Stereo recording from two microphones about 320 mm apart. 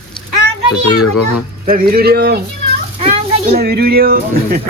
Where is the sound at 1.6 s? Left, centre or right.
Right.